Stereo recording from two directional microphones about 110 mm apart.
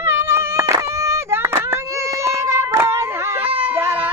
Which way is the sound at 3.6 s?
15° right (ahead or behind).